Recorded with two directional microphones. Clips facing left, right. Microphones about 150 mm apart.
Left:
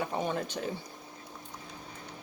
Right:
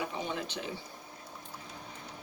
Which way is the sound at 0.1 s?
45° left (ahead or behind).